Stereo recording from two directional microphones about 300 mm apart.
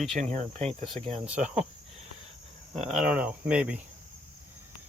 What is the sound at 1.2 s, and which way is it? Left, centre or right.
Speech, centre.